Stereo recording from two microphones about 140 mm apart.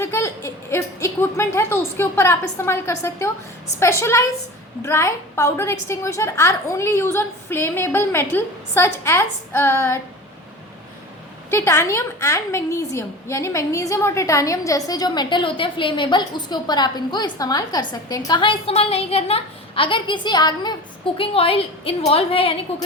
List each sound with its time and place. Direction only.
0.0 s a woman's voice: 20° left (ahead or behind)
11.5 s a woman's voice: 20° left (ahead or behind)
21.2 s a woman's voice: 40° left (ahead or behind)